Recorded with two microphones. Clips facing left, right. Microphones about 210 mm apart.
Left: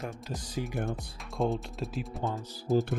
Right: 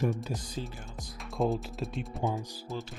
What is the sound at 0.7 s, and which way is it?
Speech, 60° left (ahead or behind).